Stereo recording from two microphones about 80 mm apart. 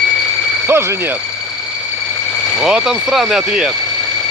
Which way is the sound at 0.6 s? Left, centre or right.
Right.